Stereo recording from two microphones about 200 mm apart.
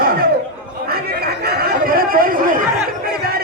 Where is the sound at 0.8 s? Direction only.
50° right (ahead or behind).